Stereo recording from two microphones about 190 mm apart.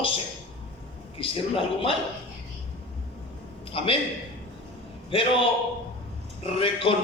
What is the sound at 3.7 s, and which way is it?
Speech, 30° left (ahead or behind).